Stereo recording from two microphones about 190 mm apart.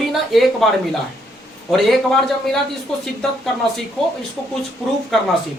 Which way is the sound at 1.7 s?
Centre (ahead or behind).